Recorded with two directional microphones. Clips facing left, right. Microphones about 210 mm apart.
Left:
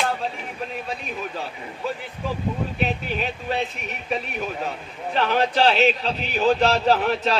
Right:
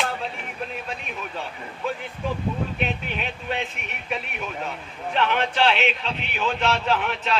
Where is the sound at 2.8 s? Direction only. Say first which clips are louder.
Left 3 dB; 40° left (ahead or behind).